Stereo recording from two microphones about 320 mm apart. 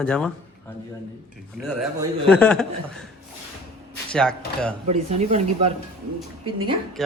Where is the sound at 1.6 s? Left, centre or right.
Centre.